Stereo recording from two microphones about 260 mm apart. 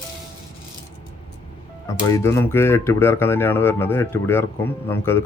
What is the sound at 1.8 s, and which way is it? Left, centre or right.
Speech, centre.